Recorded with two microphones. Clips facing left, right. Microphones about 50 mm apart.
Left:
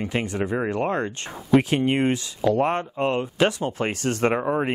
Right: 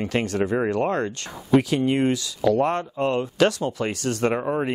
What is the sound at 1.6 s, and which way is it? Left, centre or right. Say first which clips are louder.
Speech: even; left.